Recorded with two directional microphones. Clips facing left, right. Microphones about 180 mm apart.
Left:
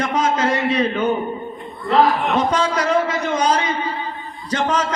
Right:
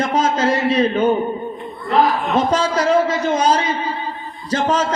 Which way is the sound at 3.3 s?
30° right (ahead or behind).